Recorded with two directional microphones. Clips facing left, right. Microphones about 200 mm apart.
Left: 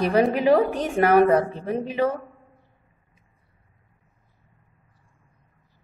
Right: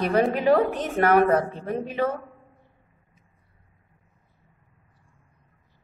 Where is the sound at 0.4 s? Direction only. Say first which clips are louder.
Left 2 dB; 10° left (ahead or behind).